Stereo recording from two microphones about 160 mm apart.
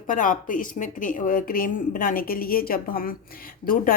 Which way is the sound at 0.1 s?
55° left (ahead or behind).